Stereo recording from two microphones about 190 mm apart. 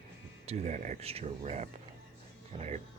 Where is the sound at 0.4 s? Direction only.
40° right (ahead or behind).